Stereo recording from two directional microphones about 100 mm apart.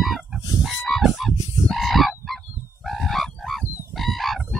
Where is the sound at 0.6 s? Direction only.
Centre (ahead or behind).